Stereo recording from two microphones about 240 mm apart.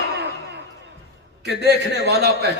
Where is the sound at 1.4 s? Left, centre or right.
Right.